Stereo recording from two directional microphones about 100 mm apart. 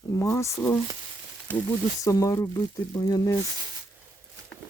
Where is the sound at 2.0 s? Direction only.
35° left (ahead or behind).